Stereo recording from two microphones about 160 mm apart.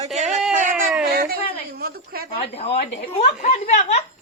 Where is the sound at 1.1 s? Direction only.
70° right (ahead or behind).